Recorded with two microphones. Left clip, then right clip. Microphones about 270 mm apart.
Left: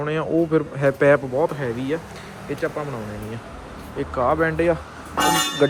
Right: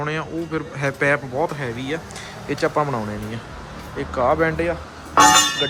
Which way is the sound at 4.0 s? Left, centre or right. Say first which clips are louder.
Right 1 dB; centre.